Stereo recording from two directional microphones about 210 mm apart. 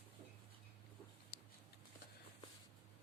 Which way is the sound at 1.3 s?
45° left (ahead or behind).